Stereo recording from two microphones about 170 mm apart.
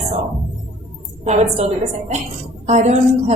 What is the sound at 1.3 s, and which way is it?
A woman's voice, 40° right (ahead or behind).